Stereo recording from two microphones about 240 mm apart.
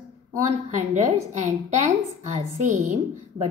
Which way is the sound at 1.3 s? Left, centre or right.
Right.